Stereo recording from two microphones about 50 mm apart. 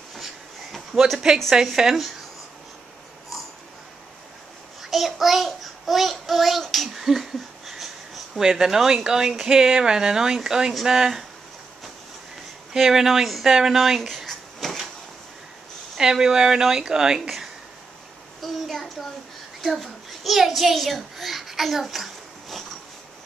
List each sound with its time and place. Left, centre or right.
0.1 s a sound: centre
1.5 s speech: centre
4.8 s a child's voice: centre
6.9 s speech: centre
12.7 s speech: centre
16.0 s speech: centre
18.4 s child singing: centre
19.6 s a sound: centre